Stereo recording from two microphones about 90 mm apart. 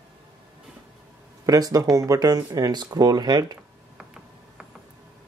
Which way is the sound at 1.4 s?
40° right (ahead or behind).